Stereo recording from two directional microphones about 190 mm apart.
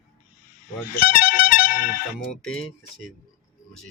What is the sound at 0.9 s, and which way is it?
Speech, 50° left (ahead or behind).